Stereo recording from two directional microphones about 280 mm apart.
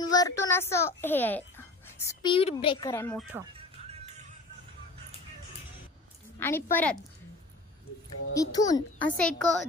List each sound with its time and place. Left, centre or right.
0.0 s a child's voice: centre
3.5 s music: right
6.4 s a child's voice: centre
8.4 s a child's voice: centre